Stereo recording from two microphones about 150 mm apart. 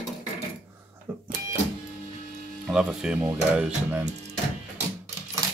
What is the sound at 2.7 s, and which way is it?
Speech, 5° right (ahead or behind).